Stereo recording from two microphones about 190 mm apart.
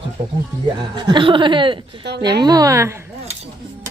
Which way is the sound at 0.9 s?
25° right (ahead or behind).